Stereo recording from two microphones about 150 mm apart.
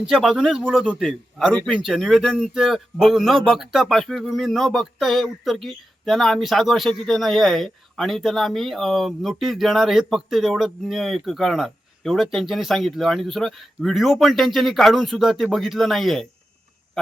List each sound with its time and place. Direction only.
0.0 s speech: centre (ahead or behind)